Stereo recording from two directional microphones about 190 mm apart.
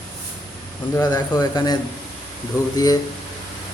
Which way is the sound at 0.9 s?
20° left (ahead or behind).